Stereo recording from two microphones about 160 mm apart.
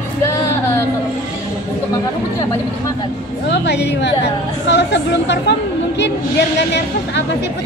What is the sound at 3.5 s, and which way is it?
Speech, 90° left.